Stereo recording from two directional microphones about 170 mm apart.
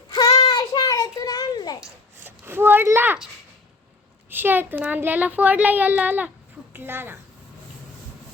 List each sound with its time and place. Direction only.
0.1 s child singing: 25° left (ahead or behind)
1.8 s a sound: 10° right (ahead or behind)
4.3 s speech: 10° right (ahead or behind)